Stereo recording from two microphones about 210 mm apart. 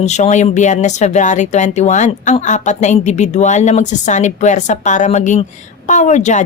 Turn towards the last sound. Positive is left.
turn(degrees=35)  # may be behind; listen again after turning